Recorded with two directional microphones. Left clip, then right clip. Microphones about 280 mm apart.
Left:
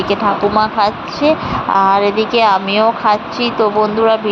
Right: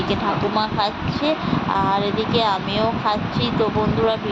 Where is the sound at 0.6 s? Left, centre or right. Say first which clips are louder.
Left 8 dB; centre.